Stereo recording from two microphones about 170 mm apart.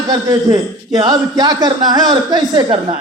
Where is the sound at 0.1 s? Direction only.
20° right (ahead or behind).